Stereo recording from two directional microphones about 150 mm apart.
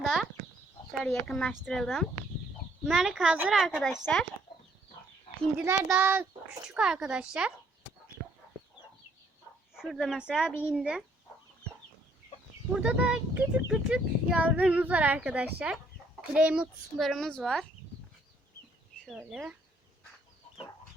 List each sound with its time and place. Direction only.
0.0 s chicken: centre (ahead or behind)
1.0 s speech: 5° left (ahead or behind)
5.5 s speech: 10° right (ahead or behind)
9.7 s speech: centre (ahead or behind)
12.7 s speech: 5° right (ahead or behind)
19.0 s speech: 5° right (ahead or behind)